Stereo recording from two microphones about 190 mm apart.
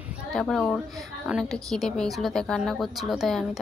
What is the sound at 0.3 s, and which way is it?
A woman's voice, centre (ahead or behind).